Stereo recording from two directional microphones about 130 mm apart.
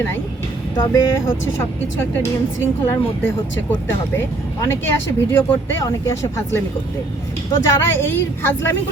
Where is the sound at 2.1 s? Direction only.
20° left (ahead or behind).